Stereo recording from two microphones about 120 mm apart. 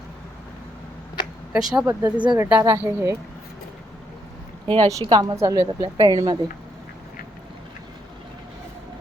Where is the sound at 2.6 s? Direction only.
20° right (ahead or behind).